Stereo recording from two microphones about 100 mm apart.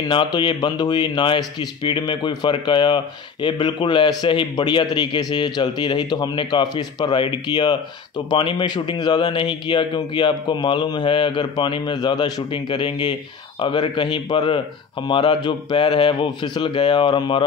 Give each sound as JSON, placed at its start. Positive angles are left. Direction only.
{"t": 0.1, "sound": "a man's voice", "side_deg": 50}